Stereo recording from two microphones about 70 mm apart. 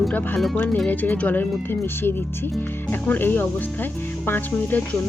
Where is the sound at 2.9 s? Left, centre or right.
Left.